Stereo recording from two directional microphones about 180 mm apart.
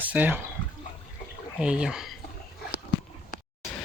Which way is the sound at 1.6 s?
5° right (ahead or behind).